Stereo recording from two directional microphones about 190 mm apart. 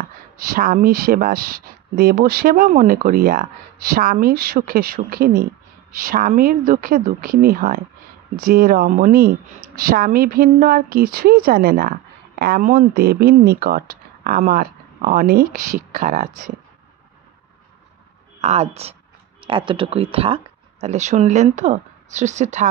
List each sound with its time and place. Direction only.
0.4 s speech: 50° right (ahead or behind)
18.4 s speech: 35° right (ahead or behind)